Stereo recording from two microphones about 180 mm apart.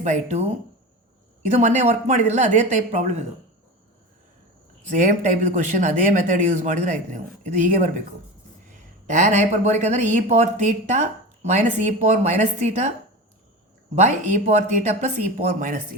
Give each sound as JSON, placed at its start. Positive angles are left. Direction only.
{"t": 0.0, "sound": "speech", "side_deg": -40}
{"t": 4.9, "sound": "speech", "side_deg": -45}
{"t": 9.0, "sound": "speech", "side_deg": -45}
{"t": 13.9, "sound": "speech", "side_deg": -40}